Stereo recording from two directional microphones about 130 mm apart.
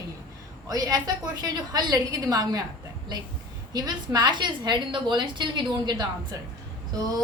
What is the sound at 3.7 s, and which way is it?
A woman's voice, 30° right (ahead or behind).